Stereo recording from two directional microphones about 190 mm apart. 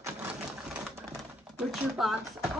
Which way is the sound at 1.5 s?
5° right (ahead or behind).